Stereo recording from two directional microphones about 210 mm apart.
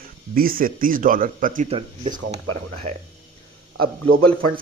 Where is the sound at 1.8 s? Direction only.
25° right (ahead or behind).